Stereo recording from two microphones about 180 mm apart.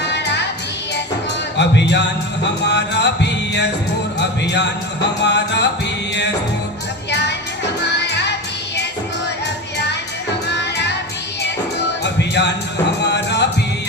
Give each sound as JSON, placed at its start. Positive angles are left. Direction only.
{"t": 0.0, "sound": "music", "side_deg": 70}
{"t": 1.5, "sound": "music", "side_deg": 75}
{"t": 7.1, "sound": "music", "side_deg": 70}
{"t": 10.5, "sound": "music", "side_deg": 75}
{"t": 12.0, "sound": "music", "side_deg": 70}